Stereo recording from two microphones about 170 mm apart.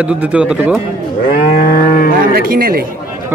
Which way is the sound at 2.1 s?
60° right (ahead or behind).